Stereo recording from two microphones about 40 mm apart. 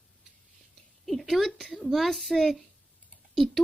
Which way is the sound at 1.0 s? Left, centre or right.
Centre.